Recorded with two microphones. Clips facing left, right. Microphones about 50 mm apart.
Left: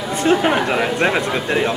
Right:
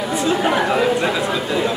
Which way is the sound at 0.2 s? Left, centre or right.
Left.